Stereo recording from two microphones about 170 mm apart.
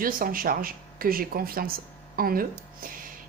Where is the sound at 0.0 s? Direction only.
55° right (ahead or behind).